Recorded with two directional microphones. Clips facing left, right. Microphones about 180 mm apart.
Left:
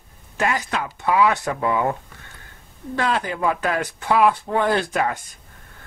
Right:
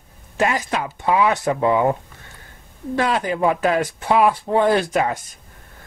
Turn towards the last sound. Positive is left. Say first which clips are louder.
# right 3 dB
turn(degrees=-20)  # may be behind; listen again after turning